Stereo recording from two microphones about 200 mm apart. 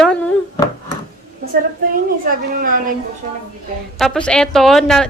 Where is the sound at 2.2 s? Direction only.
45° right (ahead or behind).